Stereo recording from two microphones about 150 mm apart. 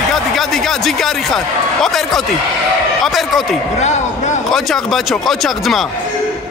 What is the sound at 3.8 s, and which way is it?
Speech, 50° left (ahead or behind).